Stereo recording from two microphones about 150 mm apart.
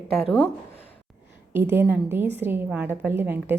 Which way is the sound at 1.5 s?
15° right (ahead or behind).